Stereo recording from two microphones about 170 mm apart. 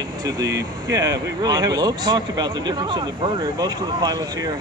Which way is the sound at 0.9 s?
20° right (ahead or behind).